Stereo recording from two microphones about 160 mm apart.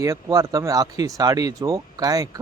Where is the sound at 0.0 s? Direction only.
20° right (ahead or behind).